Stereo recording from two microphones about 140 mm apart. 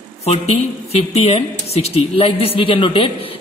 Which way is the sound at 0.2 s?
50° left (ahead or behind).